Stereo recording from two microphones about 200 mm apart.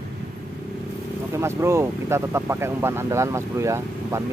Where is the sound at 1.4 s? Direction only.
15° right (ahead or behind).